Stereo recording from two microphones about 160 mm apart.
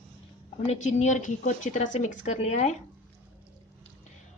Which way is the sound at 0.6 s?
45° left (ahead or behind).